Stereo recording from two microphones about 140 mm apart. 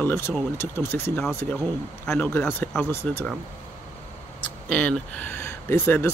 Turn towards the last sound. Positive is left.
turn(degrees=15)  # may be behind; listen again after turning